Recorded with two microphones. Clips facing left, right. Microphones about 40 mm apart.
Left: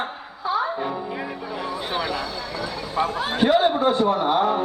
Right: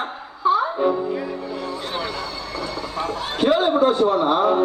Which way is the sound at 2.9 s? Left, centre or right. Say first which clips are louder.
Left 5 dB; centre.